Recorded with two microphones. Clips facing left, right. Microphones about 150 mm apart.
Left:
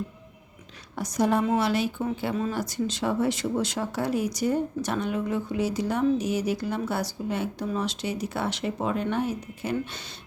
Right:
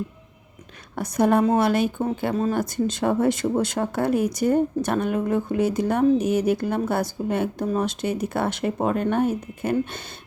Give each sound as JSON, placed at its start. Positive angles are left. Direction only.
{"t": 0.9, "sound": "a woman's voice", "side_deg": -55}